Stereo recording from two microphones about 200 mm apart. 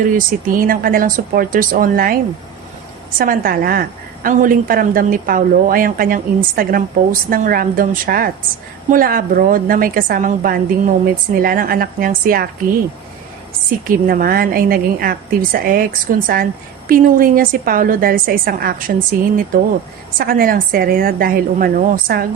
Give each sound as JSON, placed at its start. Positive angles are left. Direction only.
{"t": 0.2, "sound": "a woman's voice", "side_deg": -45}
{"t": 3.2, "sound": "a woman's voice", "side_deg": -45}
{"t": 13.7, "sound": "a woman's voice", "side_deg": -45}
{"t": 20.1, "sound": "a woman's voice", "side_deg": -45}